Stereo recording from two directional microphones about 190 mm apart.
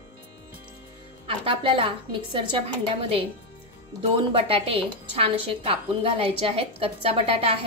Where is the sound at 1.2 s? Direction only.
30° right (ahead or behind).